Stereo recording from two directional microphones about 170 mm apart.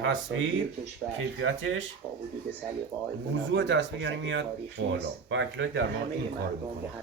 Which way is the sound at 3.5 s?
90° right.